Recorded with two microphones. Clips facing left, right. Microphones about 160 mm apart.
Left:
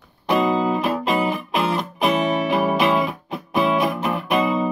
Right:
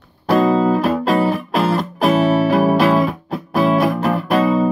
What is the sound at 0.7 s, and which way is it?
Music, 40° right (ahead or behind).